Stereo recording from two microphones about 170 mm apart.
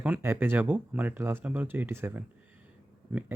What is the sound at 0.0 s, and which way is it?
Speech, 10° right (ahead or behind).